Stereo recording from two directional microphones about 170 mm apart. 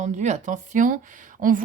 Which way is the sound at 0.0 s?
45° right (ahead or behind).